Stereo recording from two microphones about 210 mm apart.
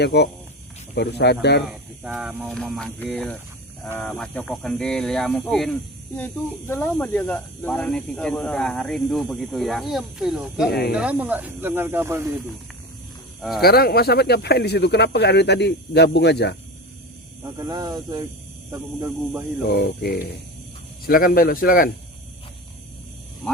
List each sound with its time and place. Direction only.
0.0 s speech: 50° left (ahead or behind)
1.6 s speech: centre (ahead or behind)
13.6 s speech: 45° left (ahead or behind)
17.4 s speech: 20° right (ahead or behind)
19.7 s speech: 50° left (ahead or behind)